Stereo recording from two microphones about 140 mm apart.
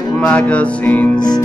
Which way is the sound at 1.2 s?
30° left (ahead or behind).